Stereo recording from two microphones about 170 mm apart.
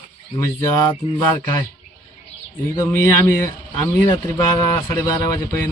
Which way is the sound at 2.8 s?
15° left (ahead or behind).